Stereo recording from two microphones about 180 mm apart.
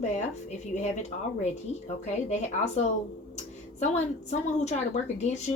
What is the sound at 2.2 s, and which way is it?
A woman's voice, 40° left (ahead or behind).